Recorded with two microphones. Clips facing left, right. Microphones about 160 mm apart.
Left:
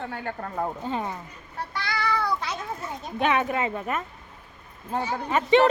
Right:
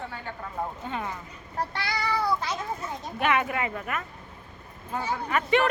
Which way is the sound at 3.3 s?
25° left (ahead or behind).